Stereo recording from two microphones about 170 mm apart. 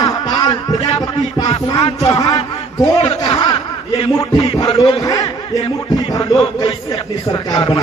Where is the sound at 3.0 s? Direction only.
35° left (ahead or behind).